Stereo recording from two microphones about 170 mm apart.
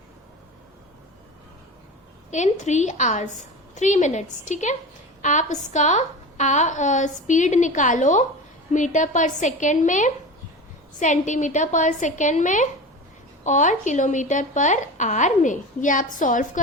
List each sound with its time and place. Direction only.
2.3 s a woman's voice: 45° left (ahead or behind)